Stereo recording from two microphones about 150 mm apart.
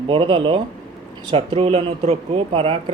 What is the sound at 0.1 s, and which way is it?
Speech, 35° right (ahead or behind).